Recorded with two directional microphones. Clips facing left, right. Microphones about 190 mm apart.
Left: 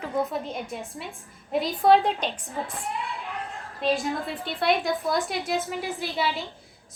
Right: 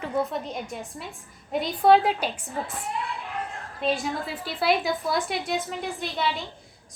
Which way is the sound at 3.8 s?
Centre (ahead or behind).